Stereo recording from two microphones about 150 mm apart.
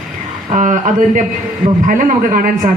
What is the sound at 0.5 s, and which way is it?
A man's voice, 55° right (ahead or behind).